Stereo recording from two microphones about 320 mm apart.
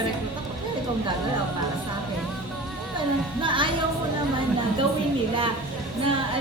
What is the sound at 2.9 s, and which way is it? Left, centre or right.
Speech, centre.